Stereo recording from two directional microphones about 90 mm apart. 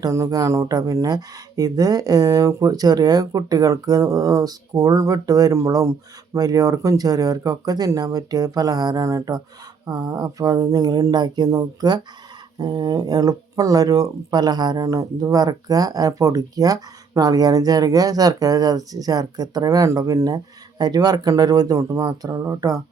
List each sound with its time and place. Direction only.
0.0 s speech: 40° right (ahead or behind)